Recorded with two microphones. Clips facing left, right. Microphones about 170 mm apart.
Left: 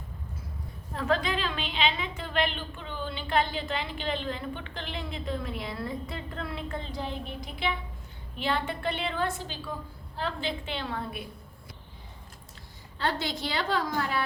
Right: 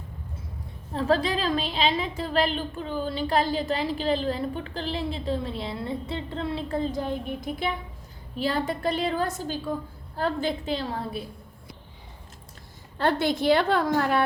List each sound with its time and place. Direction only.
0.9 s a woman's voice: 35° right (ahead or behind)
13.0 s a woman's voice: 55° right (ahead or behind)